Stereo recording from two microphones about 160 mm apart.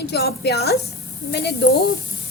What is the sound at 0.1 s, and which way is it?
A woman's voice, 90° left.